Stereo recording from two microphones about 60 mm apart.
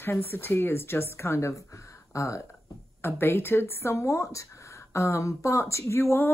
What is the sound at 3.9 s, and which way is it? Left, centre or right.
Speech, left.